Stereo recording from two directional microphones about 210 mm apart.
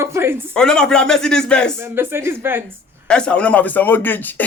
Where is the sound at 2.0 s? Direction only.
10° right (ahead or behind).